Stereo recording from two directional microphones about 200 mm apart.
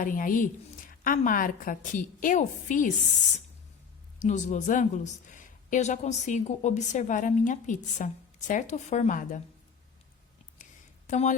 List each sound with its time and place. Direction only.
0.0 s a woman's voice: 40° left (ahead or behind)
4.2 s a woman's voice: 35° left (ahead or behind)
10.6 s a sound: 40° left (ahead or behind)